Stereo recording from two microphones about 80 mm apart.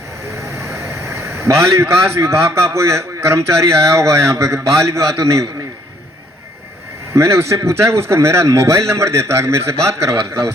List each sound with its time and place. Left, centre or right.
0.3 s speech: right
7.1 s a man's voice: right